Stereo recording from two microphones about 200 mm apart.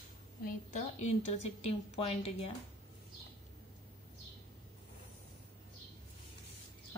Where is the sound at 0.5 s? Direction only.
35° left (ahead or behind).